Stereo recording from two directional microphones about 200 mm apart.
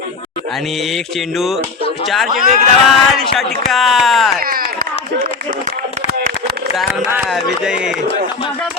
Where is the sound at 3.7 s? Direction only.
Centre (ahead or behind).